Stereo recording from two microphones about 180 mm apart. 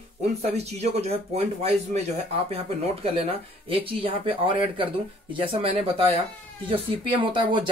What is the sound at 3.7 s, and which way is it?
Speech, 30° right (ahead or behind).